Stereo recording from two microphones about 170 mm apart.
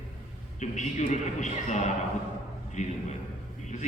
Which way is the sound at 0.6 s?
45° left (ahead or behind).